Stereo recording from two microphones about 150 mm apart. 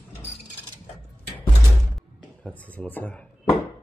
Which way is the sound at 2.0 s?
10° left (ahead or behind).